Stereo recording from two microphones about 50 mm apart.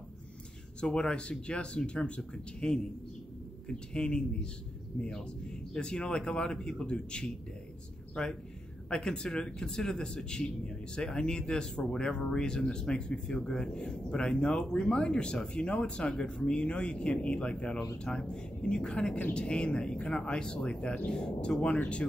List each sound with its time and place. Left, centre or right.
0.7 s speech: centre